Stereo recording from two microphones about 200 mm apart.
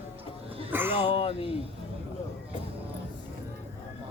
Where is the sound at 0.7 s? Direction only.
10° right (ahead or behind).